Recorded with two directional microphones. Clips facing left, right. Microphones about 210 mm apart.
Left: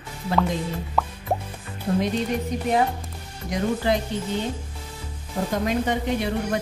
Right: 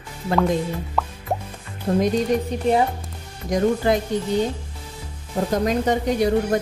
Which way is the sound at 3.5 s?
45° right (ahead or behind).